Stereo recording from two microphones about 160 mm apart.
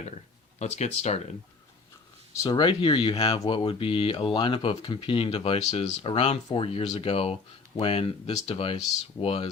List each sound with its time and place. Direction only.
0.6 s speech: 40° left (ahead or behind)
2.4 s speech: 25° left (ahead or behind)